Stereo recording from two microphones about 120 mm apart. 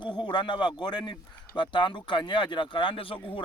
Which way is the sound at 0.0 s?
40° left (ahead or behind).